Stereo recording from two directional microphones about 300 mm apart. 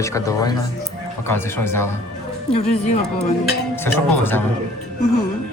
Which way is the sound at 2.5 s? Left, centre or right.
Centre.